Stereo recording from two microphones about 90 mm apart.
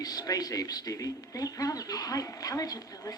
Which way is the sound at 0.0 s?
45° left (ahead or behind).